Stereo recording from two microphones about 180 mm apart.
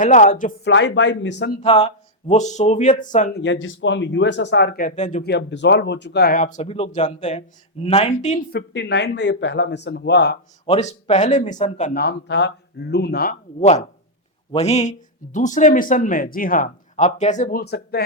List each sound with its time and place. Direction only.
0.0 s speech: 45° left (ahead or behind)
0.6 s speech: 85° left
1.6 s speech: 35° left (ahead or behind)
3.3 s speech: 90° left; by 5.2 s 45° left (ahead or behind)
5.2 s speech: 70° left (ahead or behind)
6.4 s speech: 40° left (ahead or behind)
8.5 s speech: 80° left
10.7 s speech: 35° left (ahead or behind)
11.9 s speech: 70° left (ahead or behind)
13.6 s speech: 40° left (ahead or behind)
17.6 s speech: 60° left (ahead or behind)